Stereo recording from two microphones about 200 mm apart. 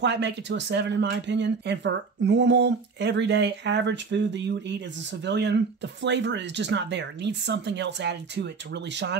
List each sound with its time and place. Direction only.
0.0 s speech: 60° right (ahead or behind)